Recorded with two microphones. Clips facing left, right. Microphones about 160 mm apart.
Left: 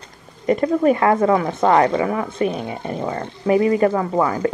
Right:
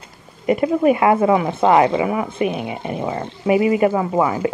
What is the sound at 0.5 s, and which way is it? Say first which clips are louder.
Speech: right 1 dB; 10° right (ahead or behind).